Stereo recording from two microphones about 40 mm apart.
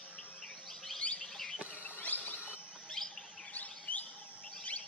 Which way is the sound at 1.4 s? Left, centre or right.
Centre.